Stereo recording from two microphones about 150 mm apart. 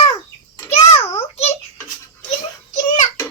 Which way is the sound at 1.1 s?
40° left (ahead or behind).